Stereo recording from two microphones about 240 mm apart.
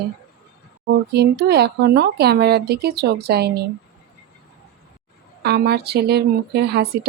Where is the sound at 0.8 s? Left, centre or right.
Right.